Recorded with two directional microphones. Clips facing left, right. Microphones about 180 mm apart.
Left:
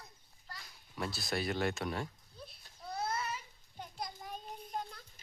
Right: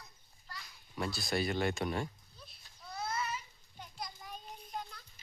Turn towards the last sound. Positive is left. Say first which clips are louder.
# left 2 dB
turn(degrees=50)  # may be behind; listen again after turning